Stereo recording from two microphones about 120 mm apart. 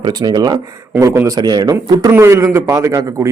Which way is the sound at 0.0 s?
35° right (ahead or behind).